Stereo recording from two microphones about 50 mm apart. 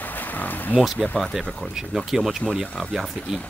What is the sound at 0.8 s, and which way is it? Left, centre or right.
Speech, centre.